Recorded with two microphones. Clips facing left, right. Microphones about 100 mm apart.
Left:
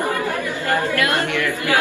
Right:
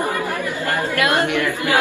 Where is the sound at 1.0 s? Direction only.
20° right (ahead or behind).